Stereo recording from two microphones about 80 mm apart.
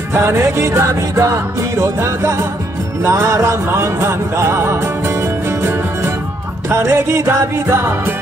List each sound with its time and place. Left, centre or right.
0.1 s music: right